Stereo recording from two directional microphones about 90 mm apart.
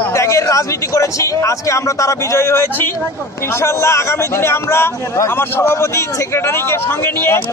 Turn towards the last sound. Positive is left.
turn(degrees=30)  # may be behind; listen again after turning